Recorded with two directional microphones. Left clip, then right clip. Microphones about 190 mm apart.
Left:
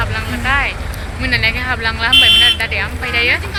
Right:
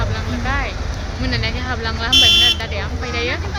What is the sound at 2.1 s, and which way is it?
Buzzer, 30° left (ahead or behind).